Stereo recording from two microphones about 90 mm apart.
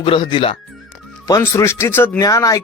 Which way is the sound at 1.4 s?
30° left (ahead or behind).